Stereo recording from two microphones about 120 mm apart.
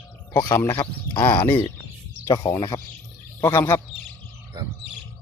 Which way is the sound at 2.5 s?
30° left (ahead or behind).